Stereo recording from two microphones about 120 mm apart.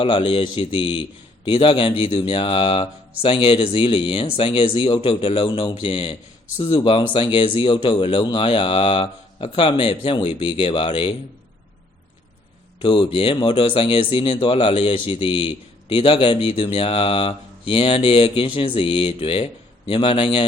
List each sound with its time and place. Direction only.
0.0 s speech: 45° left (ahead or behind)
12.8 s speech: 45° left (ahead or behind)